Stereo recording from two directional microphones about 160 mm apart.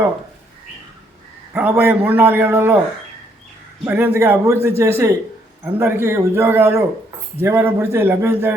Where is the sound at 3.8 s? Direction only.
10° right (ahead or behind).